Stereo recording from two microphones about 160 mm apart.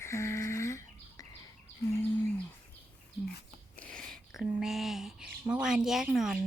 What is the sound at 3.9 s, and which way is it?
Speech, 5° left (ahead or behind).